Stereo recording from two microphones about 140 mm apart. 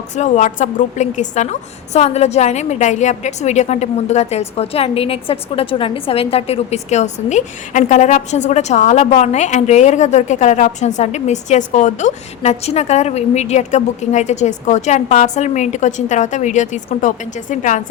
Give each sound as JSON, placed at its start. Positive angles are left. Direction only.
{"t": 0.2, "sound": "a woman's voice", "side_deg": 60}